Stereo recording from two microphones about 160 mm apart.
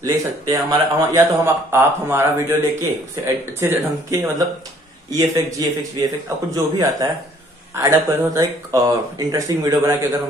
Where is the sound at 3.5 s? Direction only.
15° right (ahead or behind).